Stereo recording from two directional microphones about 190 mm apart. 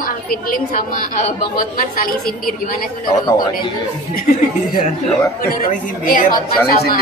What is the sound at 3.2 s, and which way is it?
Speech, 20° left (ahead or behind).